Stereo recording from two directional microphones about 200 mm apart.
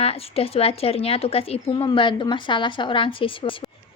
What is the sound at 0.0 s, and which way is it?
Speech, 30° left (ahead or behind).